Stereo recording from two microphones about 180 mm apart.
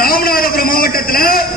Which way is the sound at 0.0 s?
55° left (ahead or behind).